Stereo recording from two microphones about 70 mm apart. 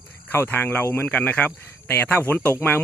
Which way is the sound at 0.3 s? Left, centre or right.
Left.